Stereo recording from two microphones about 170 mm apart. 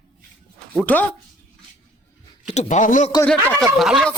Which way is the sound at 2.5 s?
45° left (ahead or behind).